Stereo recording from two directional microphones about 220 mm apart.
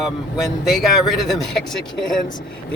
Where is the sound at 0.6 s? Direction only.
Centre (ahead or behind).